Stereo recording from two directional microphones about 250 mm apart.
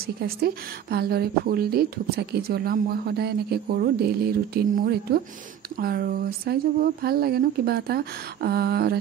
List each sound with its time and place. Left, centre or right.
0.0 s speech: right